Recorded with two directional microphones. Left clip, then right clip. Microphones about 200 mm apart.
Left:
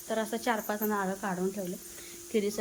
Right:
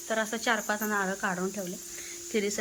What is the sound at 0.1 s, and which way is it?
Speech, 10° left (ahead or behind).